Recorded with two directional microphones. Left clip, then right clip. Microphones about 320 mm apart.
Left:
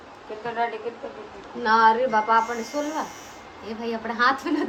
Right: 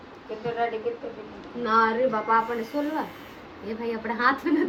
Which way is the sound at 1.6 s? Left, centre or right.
Centre.